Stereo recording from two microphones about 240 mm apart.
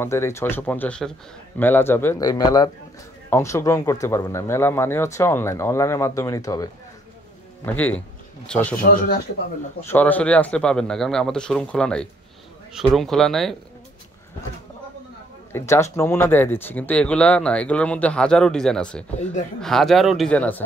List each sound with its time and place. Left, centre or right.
0.0 s speech: centre
8.8 s speech: left
9.8 s speech: centre
15.5 s speech: centre